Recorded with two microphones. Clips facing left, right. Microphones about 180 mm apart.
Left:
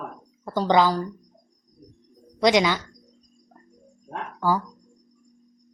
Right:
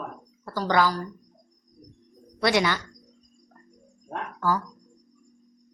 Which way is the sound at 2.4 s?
15° left (ahead or behind).